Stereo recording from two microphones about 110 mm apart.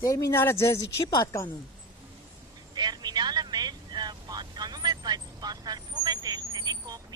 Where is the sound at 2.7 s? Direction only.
40° right (ahead or behind).